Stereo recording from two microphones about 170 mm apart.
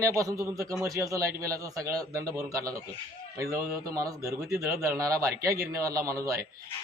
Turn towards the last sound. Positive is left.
turn(degrees=-20)  # may be behind; listen again after turning